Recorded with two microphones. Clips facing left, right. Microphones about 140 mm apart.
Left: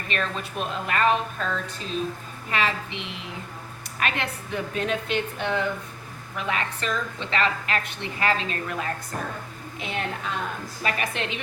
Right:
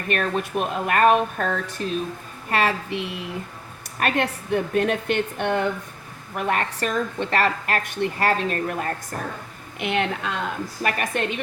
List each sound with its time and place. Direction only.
0.1 s a woman's voice: 55° right (ahead or behind)
4.0 s a woman's voice: 50° right (ahead or behind)
9.7 s a woman's voice: 70° right (ahead or behind)
10.8 s a woman's voice: 50° right (ahead or behind)